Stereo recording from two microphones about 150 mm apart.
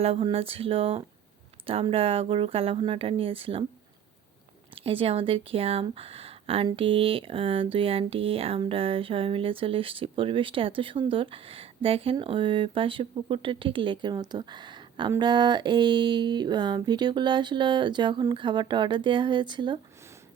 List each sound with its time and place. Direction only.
0.0 s speech: 40° right (ahead or behind)
4.7 s speech: 35° right (ahead or behind)